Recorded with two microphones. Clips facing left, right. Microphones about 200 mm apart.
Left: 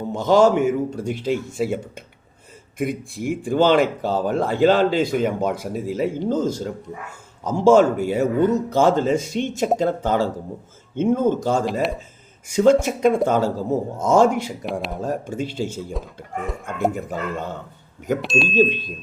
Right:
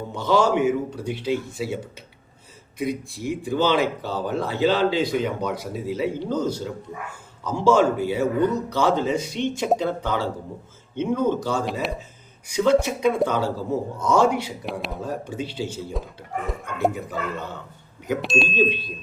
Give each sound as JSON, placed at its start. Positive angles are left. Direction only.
{"t": 0.1, "sound": "speech", "side_deg": 45}
{"t": 14.6, "sound": "a man's voice", "side_deg": 0}
{"t": 15.0, "sound": "speech", "side_deg": 45}
{"t": 16.9, "sound": "speech", "side_deg": 50}
{"t": 18.2, "sound": "a man's voice", "side_deg": 0}
{"t": 18.4, "sound": "speech", "side_deg": 45}